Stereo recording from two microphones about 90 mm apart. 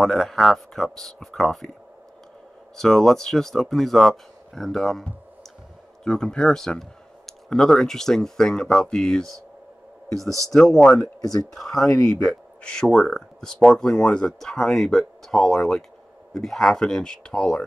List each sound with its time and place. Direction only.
0.0 s speech: 5° left (ahead or behind)
2.8 s speech: 5° left (ahead or behind)
10.5 s speech: 5° left (ahead or behind)
10.9 s speech: 40° left (ahead or behind)
11.5 s speech: 5° left (ahead or behind)